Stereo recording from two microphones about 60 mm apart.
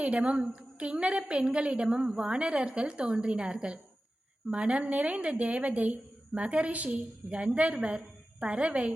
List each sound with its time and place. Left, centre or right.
0.0 s a woman's voice: right